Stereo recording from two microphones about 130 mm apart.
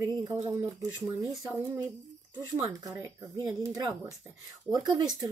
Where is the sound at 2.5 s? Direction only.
30° right (ahead or behind).